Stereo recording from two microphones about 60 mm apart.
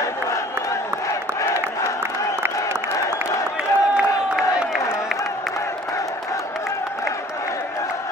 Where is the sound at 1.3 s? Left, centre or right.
Left.